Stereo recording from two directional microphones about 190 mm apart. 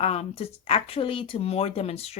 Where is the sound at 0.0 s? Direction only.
30° left (ahead or behind).